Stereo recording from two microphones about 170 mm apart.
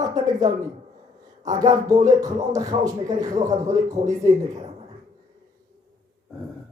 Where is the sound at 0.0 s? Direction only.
20° right (ahead or behind).